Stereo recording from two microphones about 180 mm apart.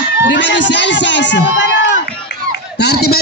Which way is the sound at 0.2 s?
80° left.